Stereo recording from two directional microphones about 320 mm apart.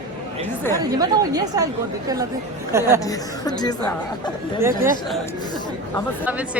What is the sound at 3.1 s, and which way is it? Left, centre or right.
Speech, centre.